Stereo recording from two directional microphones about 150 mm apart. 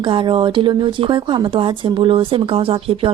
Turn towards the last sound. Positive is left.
turn(degrees=-35)  # may be behind; listen again after turning